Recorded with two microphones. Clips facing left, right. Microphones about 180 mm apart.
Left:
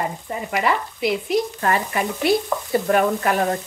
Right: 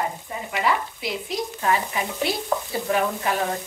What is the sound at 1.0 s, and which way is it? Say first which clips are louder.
A woman's voice: left 8 dB; 60° left (ahead or behind).